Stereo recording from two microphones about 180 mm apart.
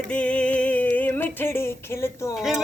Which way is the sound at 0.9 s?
10° left (ahead or behind).